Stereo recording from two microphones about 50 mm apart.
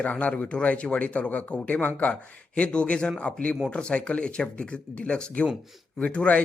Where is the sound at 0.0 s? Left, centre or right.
Left.